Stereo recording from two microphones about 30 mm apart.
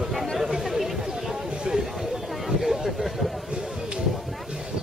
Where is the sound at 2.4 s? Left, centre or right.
Centre.